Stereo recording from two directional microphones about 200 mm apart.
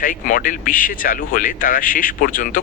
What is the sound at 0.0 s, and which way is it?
A man's voice, 45° left (ahead or behind).